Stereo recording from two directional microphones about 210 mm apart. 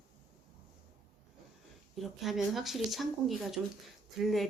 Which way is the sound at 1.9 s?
Centre (ahead or behind).